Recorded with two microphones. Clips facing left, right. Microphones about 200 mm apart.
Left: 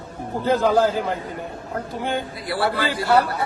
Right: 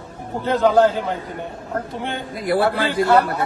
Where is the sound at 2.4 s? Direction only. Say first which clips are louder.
Right 6 dB; 50° right (ahead or behind).